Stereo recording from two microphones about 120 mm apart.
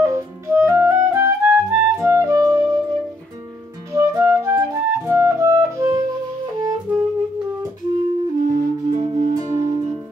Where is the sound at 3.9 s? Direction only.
25° right (ahead or behind).